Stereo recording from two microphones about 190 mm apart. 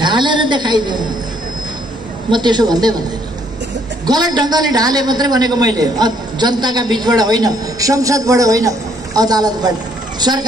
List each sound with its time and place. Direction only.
0.0 s a sound: 25° right (ahead or behind)
2.3 s a man's voice: 20° right (ahead or behind)
4.0 s a man's voice: 20° right (ahead or behind)